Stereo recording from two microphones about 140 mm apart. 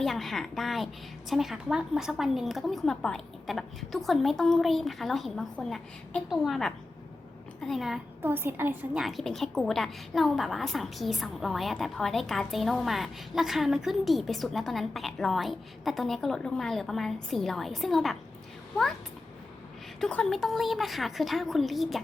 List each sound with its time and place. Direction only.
0.0 s a woman's voice: centre (ahead or behind)
8.2 s a woman's voice: 15° right (ahead or behind)
9.0 s a woman's voice: centre (ahead or behind)
20.0 s a woman's voice: 5° left (ahead or behind)